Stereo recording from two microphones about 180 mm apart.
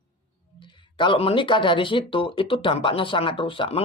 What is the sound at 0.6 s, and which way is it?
Speech, 25° left (ahead or behind).